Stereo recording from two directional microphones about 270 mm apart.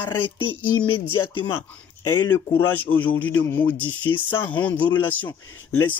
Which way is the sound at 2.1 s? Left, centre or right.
Centre.